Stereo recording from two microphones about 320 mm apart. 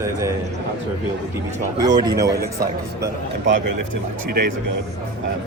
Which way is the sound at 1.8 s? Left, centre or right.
Centre.